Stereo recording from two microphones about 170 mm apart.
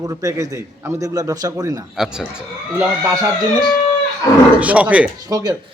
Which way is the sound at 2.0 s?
5° right (ahead or behind).